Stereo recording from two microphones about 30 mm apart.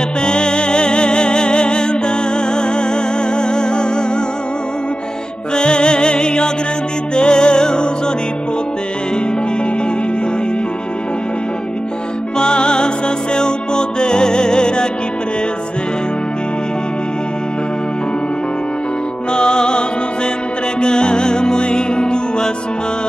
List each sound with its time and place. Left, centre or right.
0.2 s music: left
5.5 s music: left
12.4 s music: left
19.3 s music: left
20.8 s music: left